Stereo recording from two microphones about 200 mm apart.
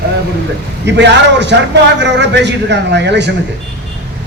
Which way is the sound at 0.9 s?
60° right (ahead or behind).